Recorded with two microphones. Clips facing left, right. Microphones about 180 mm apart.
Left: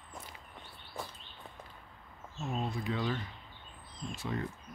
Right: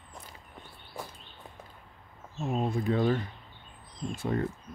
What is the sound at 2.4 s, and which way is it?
Speech, 50° right (ahead or behind).